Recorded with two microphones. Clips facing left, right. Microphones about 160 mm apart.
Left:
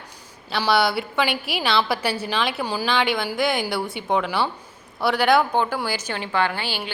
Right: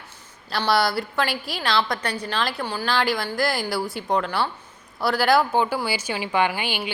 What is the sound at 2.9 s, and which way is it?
A woman's voice, centre (ahead or behind).